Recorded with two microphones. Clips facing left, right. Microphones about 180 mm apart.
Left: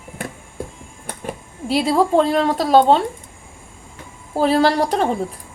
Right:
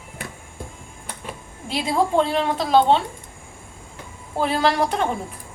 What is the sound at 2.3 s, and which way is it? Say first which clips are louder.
Speech: left 4 dB; 40° left (ahead or behind).